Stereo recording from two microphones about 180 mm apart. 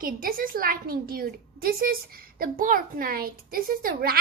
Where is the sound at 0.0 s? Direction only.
50° right (ahead or behind).